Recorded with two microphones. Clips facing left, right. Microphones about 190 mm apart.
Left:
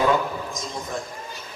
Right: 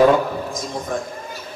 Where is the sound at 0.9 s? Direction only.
55° right (ahead or behind).